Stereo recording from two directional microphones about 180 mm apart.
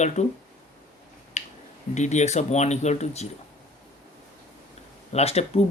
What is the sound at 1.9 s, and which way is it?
Speech, 40° left (ahead or behind).